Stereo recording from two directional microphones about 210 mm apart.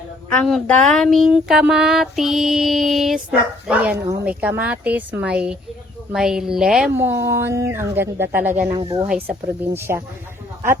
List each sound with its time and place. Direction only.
0.3 s a sound: 5° left (ahead or behind)
4.2 s a woman's voice: 5° right (ahead or behind)
8.7 s speech: 20° right (ahead or behind)
9.0 s a woman's voice: 10° right (ahead or behind)